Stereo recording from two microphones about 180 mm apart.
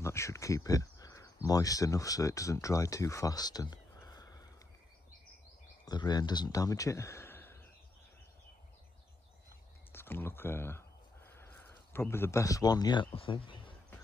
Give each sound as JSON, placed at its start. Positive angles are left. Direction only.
{"t": 0.0, "sound": "speech", "side_deg": 15}
{"t": 5.9, "sound": "speech", "side_deg": 25}
{"t": 9.9, "sound": "speech", "side_deg": 10}